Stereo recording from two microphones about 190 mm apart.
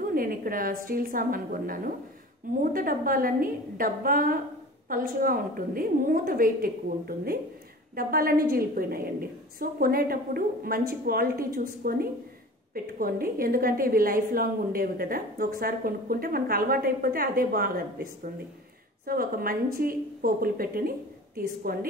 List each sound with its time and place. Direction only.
0.0 s a woman's voice: 50° right (ahead or behind)